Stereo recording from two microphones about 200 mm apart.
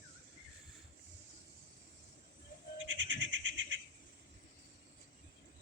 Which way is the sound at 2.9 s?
70° right (ahead or behind).